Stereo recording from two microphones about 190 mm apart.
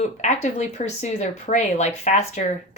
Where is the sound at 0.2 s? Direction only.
35° left (ahead or behind).